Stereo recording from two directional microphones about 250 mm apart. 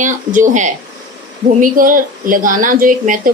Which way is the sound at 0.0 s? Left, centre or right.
Right.